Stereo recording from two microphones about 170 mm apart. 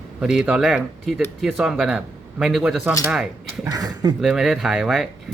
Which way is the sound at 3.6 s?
20° right (ahead or behind).